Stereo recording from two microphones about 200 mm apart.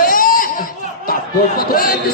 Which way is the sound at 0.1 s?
45° left (ahead or behind).